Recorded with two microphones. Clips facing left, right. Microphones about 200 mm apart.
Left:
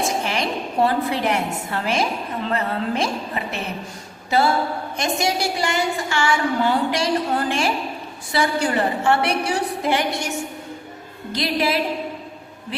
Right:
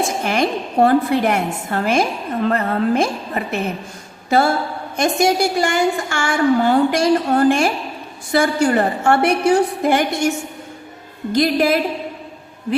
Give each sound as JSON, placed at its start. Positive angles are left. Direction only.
{"t": 0.3, "sound": "a woman's voice", "side_deg": -50}